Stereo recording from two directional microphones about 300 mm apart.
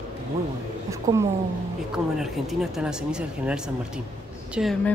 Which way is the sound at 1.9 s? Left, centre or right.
Centre.